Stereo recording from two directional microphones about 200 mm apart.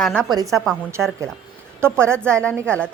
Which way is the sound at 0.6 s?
Centre (ahead or behind).